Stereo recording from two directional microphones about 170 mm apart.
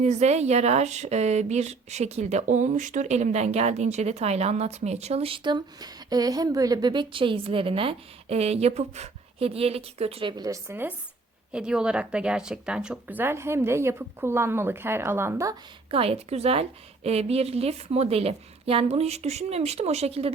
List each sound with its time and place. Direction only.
0.0 s a woman's voice: 40° right (ahead or behind); by 15.5 s 15° right (ahead or behind)
15.9 s speech: 35° right (ahead or behind)